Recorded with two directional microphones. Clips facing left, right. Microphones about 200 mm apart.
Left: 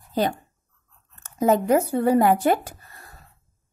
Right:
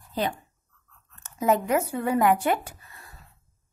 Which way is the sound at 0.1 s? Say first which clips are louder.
Left 5 dB; 40° left (ahead or behind).